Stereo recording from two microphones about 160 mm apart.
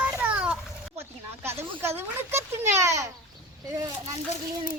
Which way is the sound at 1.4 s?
15° right (ahead or behind).